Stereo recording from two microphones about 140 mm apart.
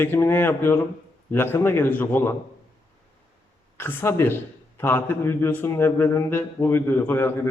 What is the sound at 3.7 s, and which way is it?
A man's voice, 15° left (ahead or behind).